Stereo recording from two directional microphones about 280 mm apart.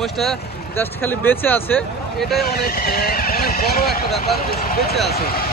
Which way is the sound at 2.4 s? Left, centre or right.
Left.